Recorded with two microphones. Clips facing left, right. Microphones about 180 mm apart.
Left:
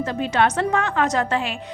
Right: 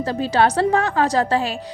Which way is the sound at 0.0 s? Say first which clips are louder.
Right 2 dB; 35° right (ahead or behind).